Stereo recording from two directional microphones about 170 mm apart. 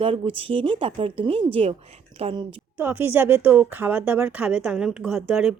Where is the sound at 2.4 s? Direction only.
10° right (ahead or behind).